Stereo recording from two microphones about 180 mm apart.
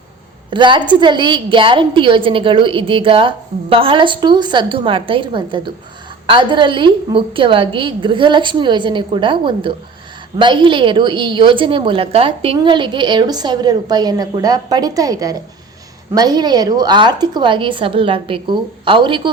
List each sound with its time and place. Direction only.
0.5 s a woman's voice: 25° right (ahead or behind)